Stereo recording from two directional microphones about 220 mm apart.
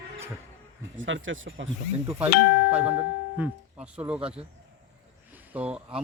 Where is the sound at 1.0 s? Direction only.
60° right (ahead or behind).